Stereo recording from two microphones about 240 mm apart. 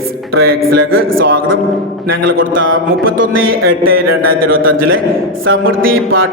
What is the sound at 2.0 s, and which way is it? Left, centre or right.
Speech, right.